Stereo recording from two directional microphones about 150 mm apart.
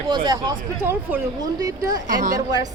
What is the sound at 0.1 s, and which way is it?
Speech, 30° right (ahead or behind).